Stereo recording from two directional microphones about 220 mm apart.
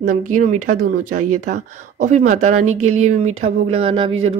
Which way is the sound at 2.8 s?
30° right (ahead or behind).